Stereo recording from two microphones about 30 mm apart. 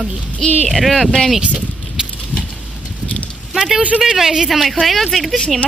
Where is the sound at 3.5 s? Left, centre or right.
Centre.